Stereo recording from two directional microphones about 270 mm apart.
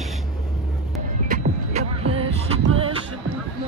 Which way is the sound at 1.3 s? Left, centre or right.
Right.